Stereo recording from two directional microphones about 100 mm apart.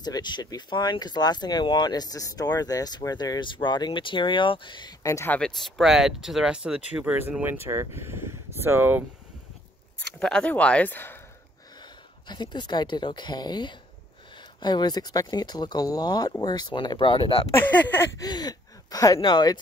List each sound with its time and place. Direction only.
0.0 s speech: 45° left (ahead or behind)
5.0 s speech: 30° left (ahead or behind)
5.3 s speech: 10° left (ahead or behind)
5.8 s speech: 5° right (ahead or behind)
7.2 s speech: 20° right (ahead or behind)
10.1 s speech: 10° left (ahead or behind)
11.8 s a woman's voice: 50° left (ahead or behind)
17.5 s speech: 20° left (ahead or behind)
18.2 s speech: 40° left (ahead or behind)
19.2 s speech: 50° left (ahead or behind)